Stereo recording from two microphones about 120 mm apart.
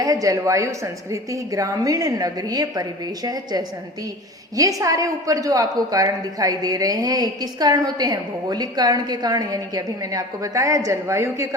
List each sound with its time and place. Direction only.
0.0 s a woman's voice: 30° right (ahead or behind)